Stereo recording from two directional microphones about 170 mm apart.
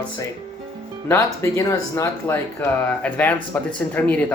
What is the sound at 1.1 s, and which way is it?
Speech, 15° left (ahead or behind).